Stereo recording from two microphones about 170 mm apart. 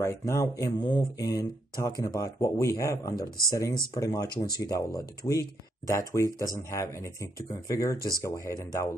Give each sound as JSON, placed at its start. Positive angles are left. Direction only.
{"t": 0.0, "sound": "speech", "side_deg": 15}